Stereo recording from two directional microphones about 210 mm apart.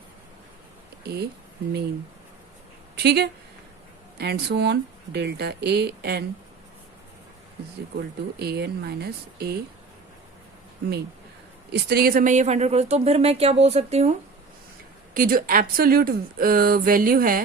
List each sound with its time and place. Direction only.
1.0 s speech: 50° right (ahead or behind)
2.9 s speech: 50° right (ahead or behind)
7.9 s speech: 50° right (ahead or behind)
11.7 s speech: 50° right (ahead or behind); by 14.2 s 30° right (ahead or behind)
15.1 s speech: 40° right (ahead or behind)